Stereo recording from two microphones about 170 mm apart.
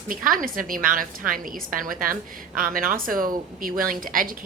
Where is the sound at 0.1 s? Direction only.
55° right (ahead or behind).